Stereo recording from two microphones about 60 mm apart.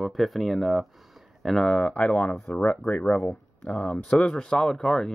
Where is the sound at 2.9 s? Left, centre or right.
Centre.